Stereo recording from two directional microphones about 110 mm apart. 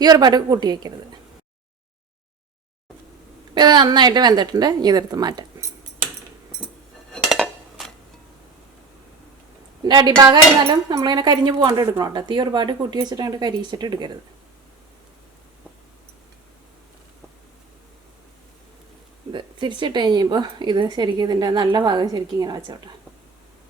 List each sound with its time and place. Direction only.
0.0 s a woman's voice: 40° right (ahead or behind)
3.5 s a woman's voice: 40° right (ahead or behind)
7.1 s dishes: centre (ahead or behind)
9.8 s a woman's voice: 40° right (ahead or behind)
19.3 s a woman's voice: 45° right (ahead or behind)